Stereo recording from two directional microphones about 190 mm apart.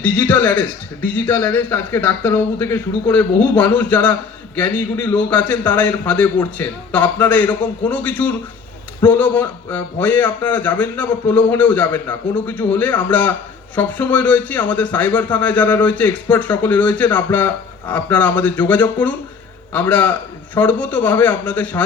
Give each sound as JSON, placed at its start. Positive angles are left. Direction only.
{"t": 0.0, "sound": "speech", "side_deg": 10}